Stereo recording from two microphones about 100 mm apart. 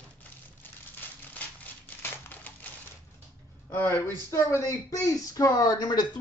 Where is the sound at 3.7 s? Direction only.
20° left (ahead or behind).